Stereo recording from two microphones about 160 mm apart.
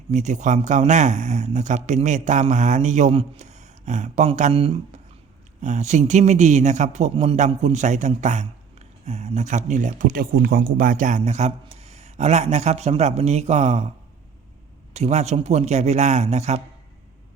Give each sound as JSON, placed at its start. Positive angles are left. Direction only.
{"t": 0.1, "sound": "speech", "side_deg": -50}
{"t": 5.6, "sound": "speech", "side_deg": -50}
{"t": 14.9, "sound": "speech", "side_deg": -45}